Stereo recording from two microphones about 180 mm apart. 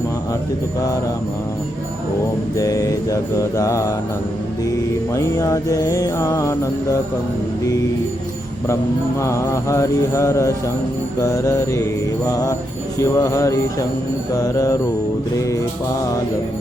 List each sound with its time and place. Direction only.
2.6 s music: 20° left (ahead or behind)
9.2 s mantra: 15° left (ahead or behind)
11.2 s music: 20° left (ahead or behind)
13.0 s mantra: 20° left (ahead or behind)
14.3 s music: 20° left (ahead or behind)
15.4 s mantra: 15° left (ahead or behind)